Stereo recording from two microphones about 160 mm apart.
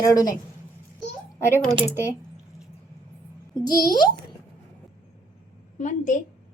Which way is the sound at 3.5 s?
25° left (ahead or behind).